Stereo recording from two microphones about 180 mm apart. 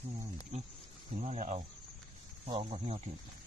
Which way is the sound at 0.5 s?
40° right (ahead or behind).